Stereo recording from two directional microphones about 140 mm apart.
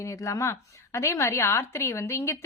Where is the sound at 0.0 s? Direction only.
20° left (ahead or behind).